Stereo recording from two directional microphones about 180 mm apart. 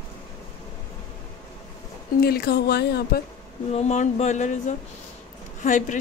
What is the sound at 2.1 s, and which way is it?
Speech, 60° left (ahead or behind).